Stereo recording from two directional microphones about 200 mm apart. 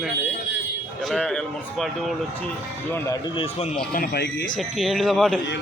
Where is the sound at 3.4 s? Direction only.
35° left (ahead or behind).